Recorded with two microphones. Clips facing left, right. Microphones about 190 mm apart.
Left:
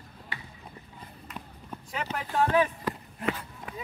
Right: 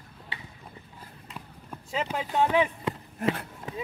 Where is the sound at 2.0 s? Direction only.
15° right (ahead or behind).